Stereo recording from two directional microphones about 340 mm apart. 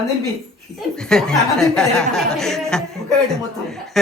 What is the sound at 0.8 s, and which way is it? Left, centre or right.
Speech, centre.